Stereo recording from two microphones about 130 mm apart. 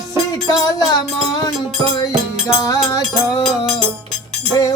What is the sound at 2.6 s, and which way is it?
Music, 25° left (ahead or behind).